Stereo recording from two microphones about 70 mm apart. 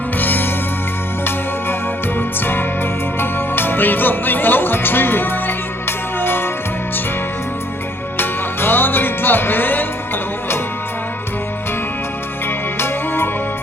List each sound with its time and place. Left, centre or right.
0.2 s music: left
2.1 s music: left
8.2 s music: left
12.8 s music: left